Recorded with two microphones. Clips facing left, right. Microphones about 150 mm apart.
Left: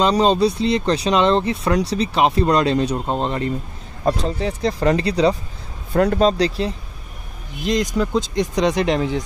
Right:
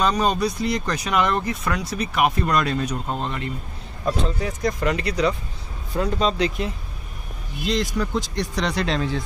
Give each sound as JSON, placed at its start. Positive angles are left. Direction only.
{"t": 0.2, "sound": "speech", "side_deg": 25}
{"t": 5.9, "sound": "speech", "side_deg": 60}
{"t": 6.2, "sound": "speech", "side_deg": 35}
{"t": 7.6, "sound": "speech", "side_deg": 20}